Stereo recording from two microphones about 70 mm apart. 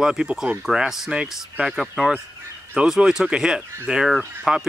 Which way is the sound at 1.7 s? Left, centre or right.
Centre.